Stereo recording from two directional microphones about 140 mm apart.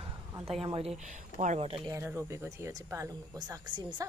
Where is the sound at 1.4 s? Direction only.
55° right (ahead or behind).